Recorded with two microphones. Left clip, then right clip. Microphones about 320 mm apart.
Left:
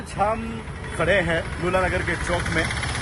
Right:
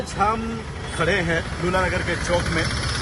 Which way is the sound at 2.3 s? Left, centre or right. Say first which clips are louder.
Right 3 dB; left.